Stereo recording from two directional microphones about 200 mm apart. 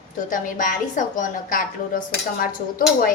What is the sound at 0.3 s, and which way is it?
A woman's voice, 40° left (ahead or behind).